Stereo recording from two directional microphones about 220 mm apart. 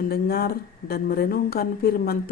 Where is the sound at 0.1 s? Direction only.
45° left (ahead or behind).